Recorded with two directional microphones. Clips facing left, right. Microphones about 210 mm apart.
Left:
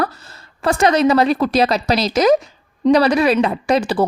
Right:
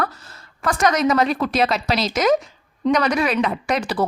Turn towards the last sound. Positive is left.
turn(degrees=30)  # may be behind; listen again after turning